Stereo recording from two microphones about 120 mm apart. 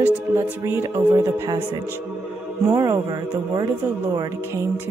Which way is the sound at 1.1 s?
30° right (ahead or behind).